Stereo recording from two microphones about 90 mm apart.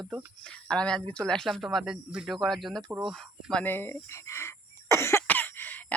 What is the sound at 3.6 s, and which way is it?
Speech, 25° left (ahead or behind).